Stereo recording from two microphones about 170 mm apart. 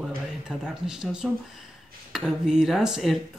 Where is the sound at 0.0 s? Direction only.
5° right (ahead or behind).